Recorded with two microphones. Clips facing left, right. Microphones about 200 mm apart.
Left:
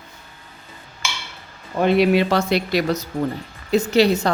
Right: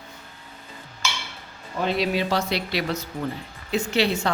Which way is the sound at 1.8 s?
60° left (ahead or behind).